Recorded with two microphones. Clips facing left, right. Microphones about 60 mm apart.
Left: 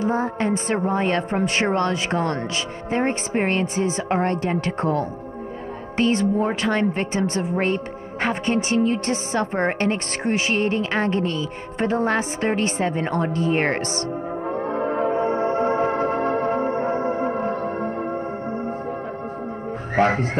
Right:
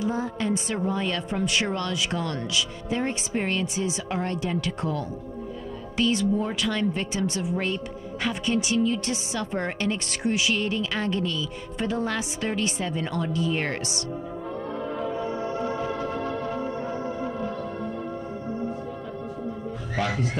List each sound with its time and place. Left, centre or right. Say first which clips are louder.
0.0 s speech: left 5 dB; left
14.5 s music: left 8 dB; left
20.0 s speech: left 9 dB; left